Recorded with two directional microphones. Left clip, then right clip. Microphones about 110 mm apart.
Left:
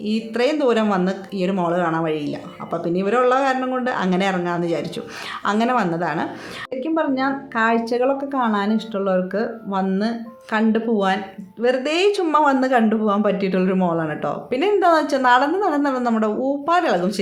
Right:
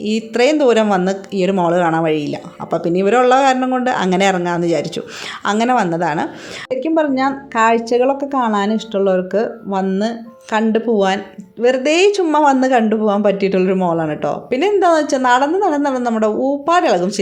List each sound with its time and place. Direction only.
0.0 s a woman's voice: 60° right (ahead or behind); by 17.2 s 40° right (ahead or behind)